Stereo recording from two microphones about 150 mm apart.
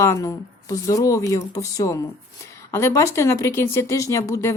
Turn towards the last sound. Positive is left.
turn(degrees=20)  # may be behind; listen again after turning